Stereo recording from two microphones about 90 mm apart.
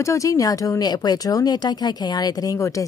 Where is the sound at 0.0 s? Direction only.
35° left (ahead or behind).